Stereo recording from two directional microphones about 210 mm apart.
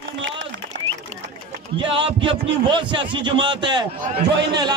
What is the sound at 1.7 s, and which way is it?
A man's voice, 25° right (ahead or behind).